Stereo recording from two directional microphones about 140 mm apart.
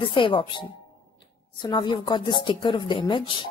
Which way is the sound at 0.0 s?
35° left (ahead or behind).